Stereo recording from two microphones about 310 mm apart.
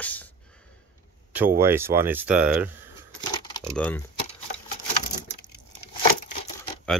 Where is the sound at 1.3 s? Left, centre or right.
Centre.